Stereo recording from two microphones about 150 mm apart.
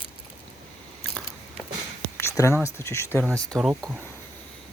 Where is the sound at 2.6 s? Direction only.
20° left (ahead or behind).